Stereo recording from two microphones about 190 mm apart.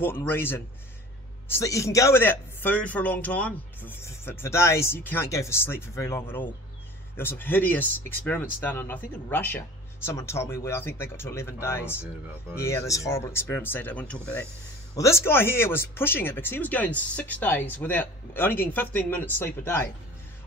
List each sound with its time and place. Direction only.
0.0 s speech: 10° left (ahead or behind)